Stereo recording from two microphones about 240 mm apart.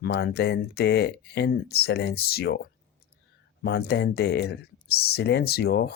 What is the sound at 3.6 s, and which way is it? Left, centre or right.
Speech, left.